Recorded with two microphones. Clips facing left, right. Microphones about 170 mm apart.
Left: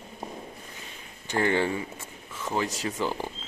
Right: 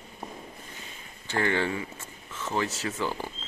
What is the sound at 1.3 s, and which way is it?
Speech, 15° left (ahead or behind).